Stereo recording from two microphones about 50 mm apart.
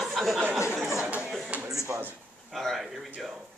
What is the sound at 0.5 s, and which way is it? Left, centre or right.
Speech, right.